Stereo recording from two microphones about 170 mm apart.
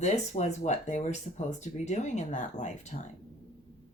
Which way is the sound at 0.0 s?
45° left (ahead or behind).